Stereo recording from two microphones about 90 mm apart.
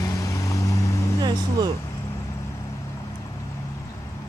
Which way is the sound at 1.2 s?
50° right (ahead or behind).